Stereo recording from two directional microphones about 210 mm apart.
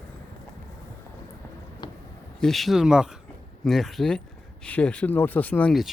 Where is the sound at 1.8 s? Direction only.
20° left (ahead or behind).